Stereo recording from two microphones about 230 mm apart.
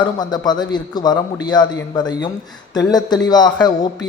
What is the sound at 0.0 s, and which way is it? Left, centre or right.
Speech, centre.